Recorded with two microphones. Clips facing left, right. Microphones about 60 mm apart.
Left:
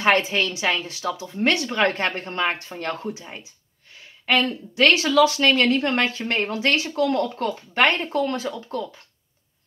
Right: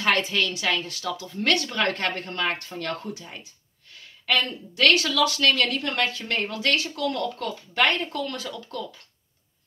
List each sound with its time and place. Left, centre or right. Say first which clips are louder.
0.0 s a woman's voice: left 4 dB; left